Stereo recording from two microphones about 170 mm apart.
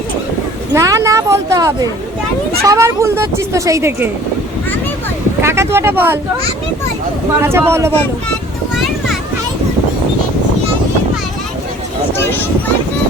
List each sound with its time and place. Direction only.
0.7 s speech: 20° right (ahead or behind)
5.4 s speech: 15° right (ahead or behind)
7.4 s speech: 15° right (ahead or behind)
8.7 s a sound: centre (ahead or behind)